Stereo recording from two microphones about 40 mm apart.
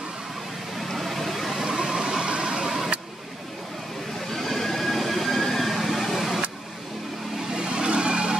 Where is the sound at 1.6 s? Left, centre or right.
Centre.